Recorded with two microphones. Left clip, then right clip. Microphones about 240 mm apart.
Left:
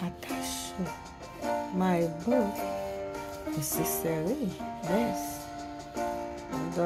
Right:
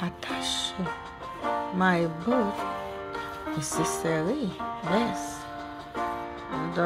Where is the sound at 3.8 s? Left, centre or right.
Centre.